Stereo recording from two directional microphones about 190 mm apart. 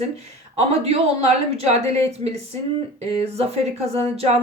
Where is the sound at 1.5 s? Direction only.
35° right (ahead or behind).